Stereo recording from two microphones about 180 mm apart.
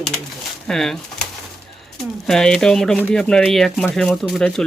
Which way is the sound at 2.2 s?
5° left (ahead or behind).